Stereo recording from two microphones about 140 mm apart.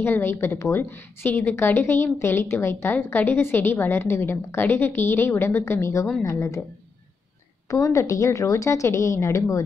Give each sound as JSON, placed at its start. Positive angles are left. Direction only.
{"t": 0.0, "sound": "a woman's voice", "side_deg": 15}
{"t": 7.7, "sound": "a woman's voice", "side_deg": 20}